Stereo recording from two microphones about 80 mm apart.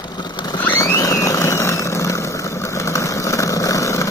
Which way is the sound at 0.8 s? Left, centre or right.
Left.